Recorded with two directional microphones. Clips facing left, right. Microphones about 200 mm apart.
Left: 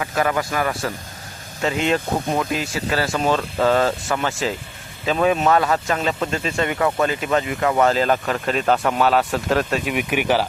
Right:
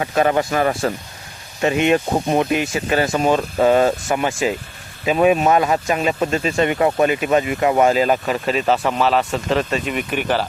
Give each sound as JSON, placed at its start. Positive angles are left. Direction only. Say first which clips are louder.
{"t": 0.0, "sound": "speech", "louder": "right 4 dB", "side_deg": -25}